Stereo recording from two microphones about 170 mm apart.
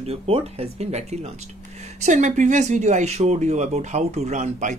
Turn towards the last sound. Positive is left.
turn(degrees=-45)  # may be behind; listen again after turning